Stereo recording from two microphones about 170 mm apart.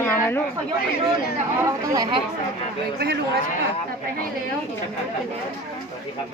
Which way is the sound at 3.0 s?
70° right (ahead or behind).